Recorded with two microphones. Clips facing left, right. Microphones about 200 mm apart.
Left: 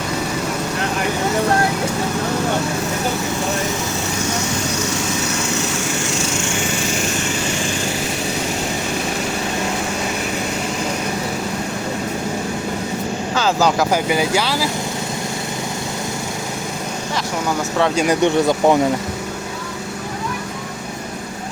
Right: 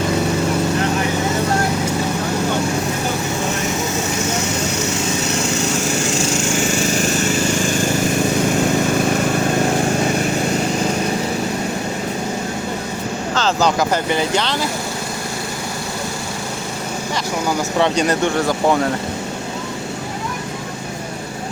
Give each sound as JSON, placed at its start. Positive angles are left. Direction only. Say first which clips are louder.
{"t": 13.3, "sound": "speech", "louder": "even", "side_deg": 10}
{"t": 17.7, "sound": "speech", "louder": "even", "side_deg": 0}
{"t": 18.1, "sound": "speech", "louder": "left 3 dB", "side_deg": 20}